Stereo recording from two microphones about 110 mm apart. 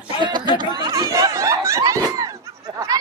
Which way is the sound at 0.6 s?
35° right (ahead or behind).